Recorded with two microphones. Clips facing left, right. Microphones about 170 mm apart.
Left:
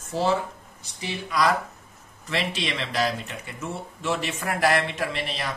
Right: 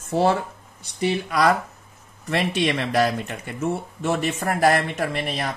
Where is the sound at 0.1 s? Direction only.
55° right (ahead or behind).